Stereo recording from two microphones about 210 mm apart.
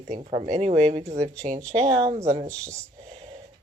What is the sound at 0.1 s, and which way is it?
Speech, 25° right (ahead or behind).